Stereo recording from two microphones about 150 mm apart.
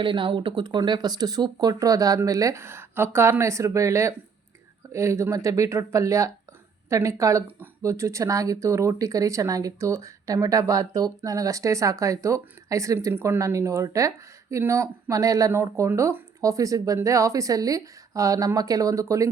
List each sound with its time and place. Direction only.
0.0 s speech: 35° right (ahead or behind)